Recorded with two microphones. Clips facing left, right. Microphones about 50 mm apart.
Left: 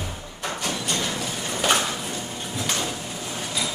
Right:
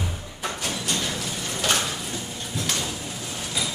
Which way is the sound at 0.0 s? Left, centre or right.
Centre.